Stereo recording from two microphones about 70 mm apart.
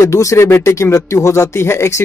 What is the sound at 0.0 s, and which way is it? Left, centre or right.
Speech, left.